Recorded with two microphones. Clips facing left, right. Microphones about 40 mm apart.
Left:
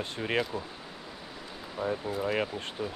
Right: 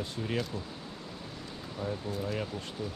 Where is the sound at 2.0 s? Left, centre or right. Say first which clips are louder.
Left 4 dB; left.